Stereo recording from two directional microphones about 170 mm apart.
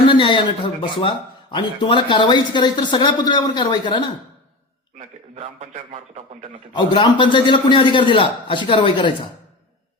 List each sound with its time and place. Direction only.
0.1 s a man's voice: 30° left (ahead or behind)
4.9 s a man's voice: 40° right (ahead or behind)
6.7 s a man's voice: 25° left (ahead or behind)